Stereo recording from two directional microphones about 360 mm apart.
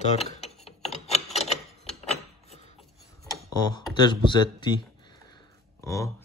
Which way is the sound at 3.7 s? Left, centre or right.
Centre.